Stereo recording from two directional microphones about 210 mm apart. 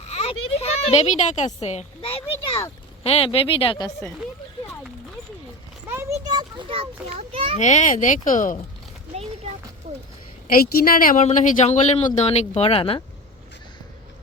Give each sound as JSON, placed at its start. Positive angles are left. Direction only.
{"t": 0.1, "sound": "children playing", "side_deg": 30}
{"t": 0.6, "sound": "a child's voice", "side_deg": 30}
{"t": 5.9, "sound": "a sound", "side_deg": -15}
{"t": 7.6, "sound": "a woman's voice", "side_deg": 35}
{"t": 10.5, "sound": "a woman's voice", "side_deg": 45}